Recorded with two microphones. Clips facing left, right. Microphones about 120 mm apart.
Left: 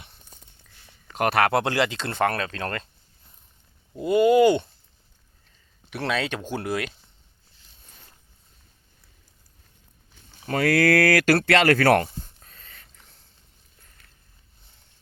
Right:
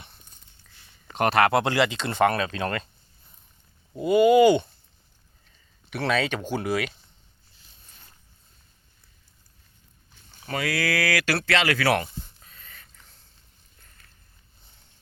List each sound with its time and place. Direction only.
1.1 s speech: 5° left (ahead or behind)
3.9 s speech: centre (ahead or behind)
5.9 s speech: centre (ahead or behind)
10.6 s speech: 50° left (ahead or behind)
12.4 s a sound: 40° left (ahead or behind)